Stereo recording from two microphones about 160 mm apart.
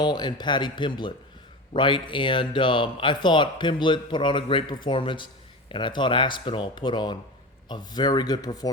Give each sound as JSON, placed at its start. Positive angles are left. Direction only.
{"t": 0.0, "sound": "speech", "side_deg": 30}